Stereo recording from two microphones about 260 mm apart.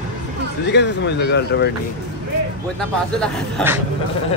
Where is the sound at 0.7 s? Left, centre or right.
Left.